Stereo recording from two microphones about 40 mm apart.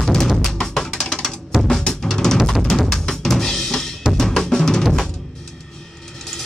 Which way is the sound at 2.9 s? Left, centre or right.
Centre.